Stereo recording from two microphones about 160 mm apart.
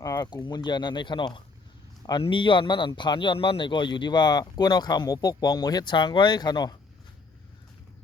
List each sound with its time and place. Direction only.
0.0 s a man's voice: 25° left (ahead or behind)